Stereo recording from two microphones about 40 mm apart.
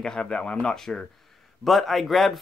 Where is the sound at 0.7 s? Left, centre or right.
Centre.